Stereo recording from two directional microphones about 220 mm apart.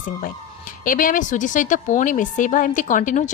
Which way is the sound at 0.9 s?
40° left (ahead or behind).